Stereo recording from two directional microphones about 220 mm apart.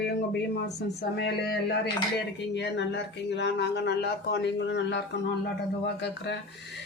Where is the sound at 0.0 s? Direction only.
50° left (ahead or behind).